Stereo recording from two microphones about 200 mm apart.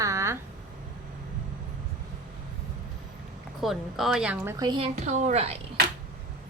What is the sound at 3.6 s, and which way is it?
A woman's voice, centre (ahead or behind).